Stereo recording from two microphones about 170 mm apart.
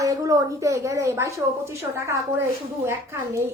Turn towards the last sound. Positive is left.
turn(degrees=-15)  # may be behind; listen again after turning